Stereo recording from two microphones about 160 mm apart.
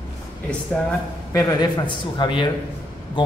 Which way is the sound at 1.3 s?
25° left (ahead or behind).